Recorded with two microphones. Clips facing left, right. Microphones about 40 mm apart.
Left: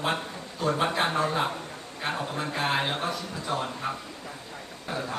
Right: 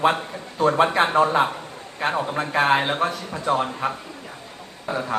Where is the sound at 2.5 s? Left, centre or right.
Right.